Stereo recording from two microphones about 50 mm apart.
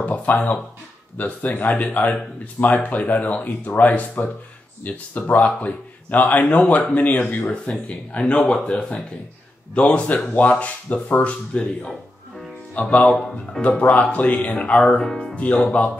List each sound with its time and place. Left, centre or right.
0.0 s speech: left
7.4 s speech: left
11.5 s speech: left
13.1 s speech: centre
13.6 s speech: left